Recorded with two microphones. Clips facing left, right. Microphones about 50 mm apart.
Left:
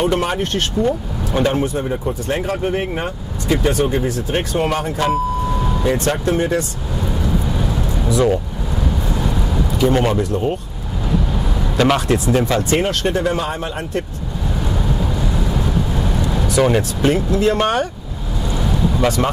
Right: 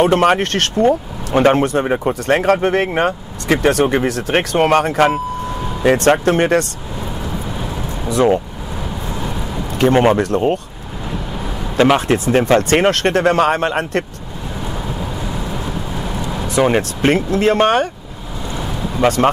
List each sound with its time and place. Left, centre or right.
0.0 s speech: right
0.8 s speech: right
1.6 s speech: right
8.1 s speech: right
9.8 s speech: right
11.7 s speech: right
12.1 s speech: right
12.6 s speech: right
15.0 s vehicle: centre
16.7 s speech: right
18.6 s vehicle: right